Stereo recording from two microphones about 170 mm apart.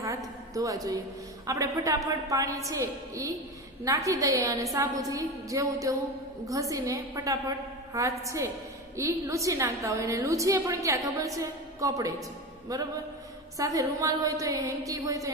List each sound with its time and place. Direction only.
0.5 s a woman's voice: 20° right (ahead or behind)